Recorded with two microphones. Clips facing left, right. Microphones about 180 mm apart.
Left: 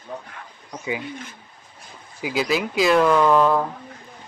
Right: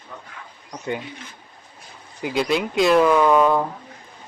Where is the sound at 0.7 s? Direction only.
5° left (ahead or behind).